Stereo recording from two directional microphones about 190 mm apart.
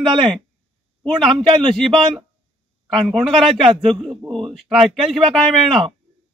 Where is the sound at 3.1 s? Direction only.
Centre (ahead or behind).